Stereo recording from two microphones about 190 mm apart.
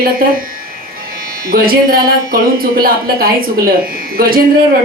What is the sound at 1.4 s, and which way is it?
A woman's voice, 50° right (ahead or behind).